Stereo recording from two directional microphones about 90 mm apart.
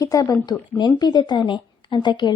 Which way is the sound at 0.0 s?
40° left (ahead or behind).